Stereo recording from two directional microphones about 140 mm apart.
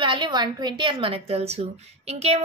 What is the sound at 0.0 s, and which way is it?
A woman's voice, 35° right (ahead or behind).